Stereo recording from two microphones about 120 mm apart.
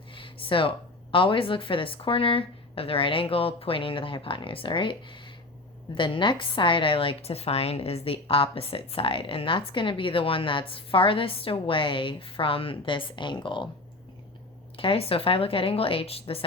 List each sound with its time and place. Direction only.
0.1 s a sound: 45° left (ahead or behind)
1.1 s a woman's voice: 45° left (ahead or behind)
14.8 s a woman's voice: 50° left (ahead or behind)